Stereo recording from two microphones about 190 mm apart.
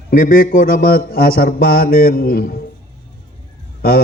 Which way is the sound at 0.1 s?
50° left (ahead or behind).